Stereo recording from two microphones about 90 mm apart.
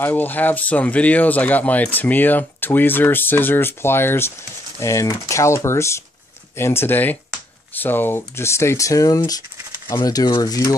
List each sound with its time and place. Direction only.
0.0 s speech: 20° left (ahead or behind)
4.7 s speech: 35° left (ahead or behind)